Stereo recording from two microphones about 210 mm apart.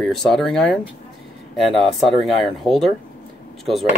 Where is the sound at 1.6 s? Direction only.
Centre (ahead or behind).